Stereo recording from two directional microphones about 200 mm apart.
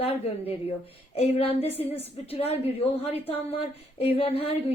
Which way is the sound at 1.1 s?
30° left (ahead or behind).